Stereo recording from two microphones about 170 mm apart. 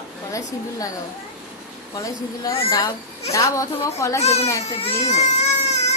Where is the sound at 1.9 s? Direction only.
20° left (ahead or behind).